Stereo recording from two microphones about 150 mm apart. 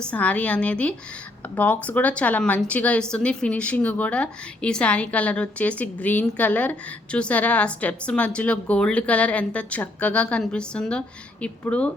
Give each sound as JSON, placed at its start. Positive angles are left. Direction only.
{"t": 0.0, "sound": "a woman's voice", "side_deg": 10}